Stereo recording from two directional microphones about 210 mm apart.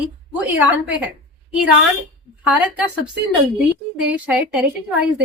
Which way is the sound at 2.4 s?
5° right (ahead or behind).